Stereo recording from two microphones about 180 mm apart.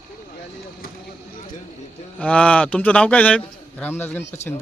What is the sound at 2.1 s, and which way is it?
A man's voice, 5° left (ahead or behind).